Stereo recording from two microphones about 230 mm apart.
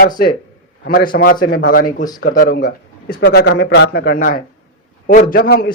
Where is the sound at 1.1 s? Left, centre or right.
Left.